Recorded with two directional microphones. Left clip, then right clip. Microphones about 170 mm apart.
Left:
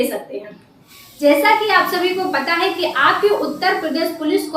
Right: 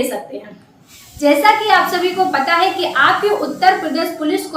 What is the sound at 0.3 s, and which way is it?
A woman's voice, 10° right (ahead or behind).